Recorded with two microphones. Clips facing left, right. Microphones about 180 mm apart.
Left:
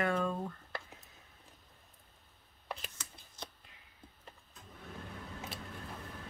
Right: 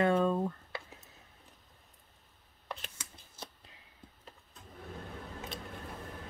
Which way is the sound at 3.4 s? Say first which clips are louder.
Even; 5° right (ahead or behind).